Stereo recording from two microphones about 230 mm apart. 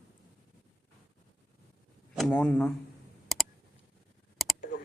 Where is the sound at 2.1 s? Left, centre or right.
Centre.